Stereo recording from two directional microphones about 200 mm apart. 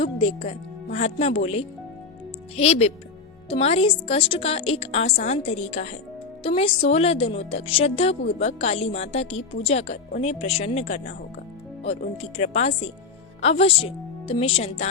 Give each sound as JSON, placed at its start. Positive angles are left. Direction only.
{"t": 0.0, "sound": "a woman's voice", "side_deg": 30}